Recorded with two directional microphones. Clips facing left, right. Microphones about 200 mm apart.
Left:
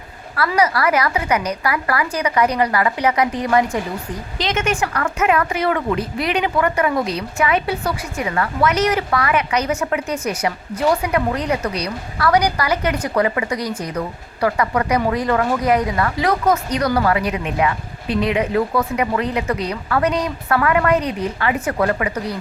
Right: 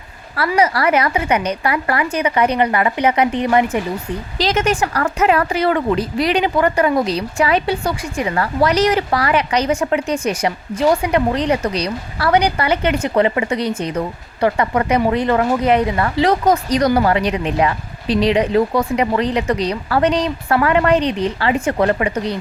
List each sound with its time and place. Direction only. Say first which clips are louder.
0.3 s a woman's voice: right 2 dB; 25° right (ahead or behind)
4.4 s a woman's voice: right 3 dB; 40° right (ahead or behind)
21.1 s a woman's voice: right 4 dB; 80° right
21.3 s a woman's voice: right 3 dB; 30° right (ahead or behind)